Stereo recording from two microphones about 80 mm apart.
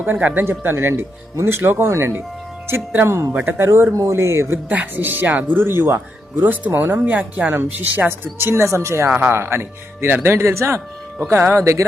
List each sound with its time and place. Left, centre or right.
0.0 s speech: right
3.3 s speech: right
3.7 s speech: right
9.0 s speech: right